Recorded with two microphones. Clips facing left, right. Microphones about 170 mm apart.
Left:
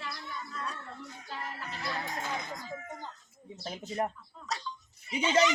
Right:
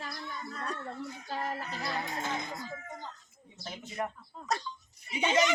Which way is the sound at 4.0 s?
35° left (ahead or behind).